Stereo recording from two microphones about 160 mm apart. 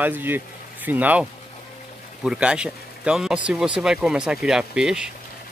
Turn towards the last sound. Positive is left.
turn(degrees=-5)  # may be behind; listen again after turning